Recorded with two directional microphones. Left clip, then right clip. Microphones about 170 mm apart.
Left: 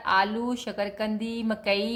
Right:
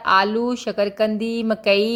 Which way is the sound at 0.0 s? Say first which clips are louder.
Right 7 dB; 40° right (ahead or behind).